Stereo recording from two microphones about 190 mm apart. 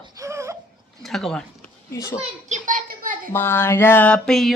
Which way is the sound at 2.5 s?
45° right (ahead or behind).